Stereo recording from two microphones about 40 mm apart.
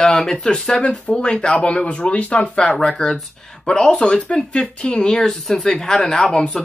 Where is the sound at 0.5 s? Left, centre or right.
Left.